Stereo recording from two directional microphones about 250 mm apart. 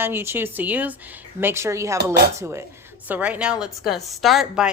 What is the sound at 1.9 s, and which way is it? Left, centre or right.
Speech, right.